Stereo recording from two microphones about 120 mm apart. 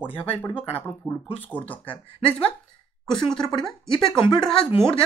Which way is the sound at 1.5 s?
15° left (ahead or behind).